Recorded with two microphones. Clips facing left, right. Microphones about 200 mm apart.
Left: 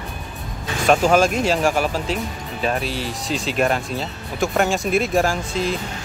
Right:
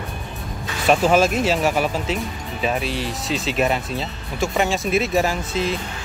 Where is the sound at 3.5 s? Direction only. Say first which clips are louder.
Left 1 dB; centre (ahead or behind).